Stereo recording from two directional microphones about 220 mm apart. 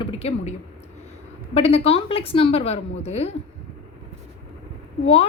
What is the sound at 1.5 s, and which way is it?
Speech, 25° left (ahead or behind).